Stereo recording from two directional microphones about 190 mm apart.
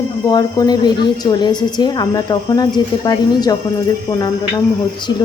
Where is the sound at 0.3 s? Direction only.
20° left (ahead or behind).